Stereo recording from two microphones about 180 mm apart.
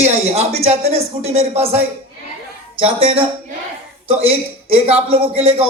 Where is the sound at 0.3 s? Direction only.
35° right (ahead or behind).